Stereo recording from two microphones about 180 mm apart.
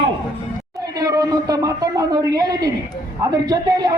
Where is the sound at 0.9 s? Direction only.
20° right (ahead or behind).